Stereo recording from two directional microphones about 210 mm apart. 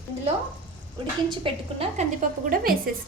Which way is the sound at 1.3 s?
25° right (ahead or behind).